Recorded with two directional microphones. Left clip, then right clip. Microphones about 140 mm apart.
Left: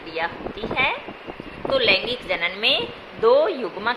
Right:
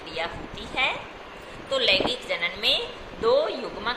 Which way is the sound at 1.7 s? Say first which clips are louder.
Left 3 dB; 70° left (ahead or behind).